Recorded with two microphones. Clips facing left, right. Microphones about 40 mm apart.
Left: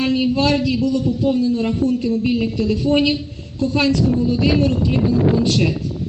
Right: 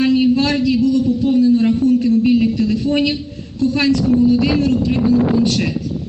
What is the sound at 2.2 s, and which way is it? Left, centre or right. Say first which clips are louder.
Speech: right 4 dB; centre.